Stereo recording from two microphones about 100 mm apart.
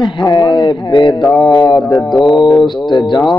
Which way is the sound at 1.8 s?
Centre (ahead or behind).